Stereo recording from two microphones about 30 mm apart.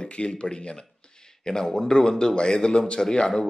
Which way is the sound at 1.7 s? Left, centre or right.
Left.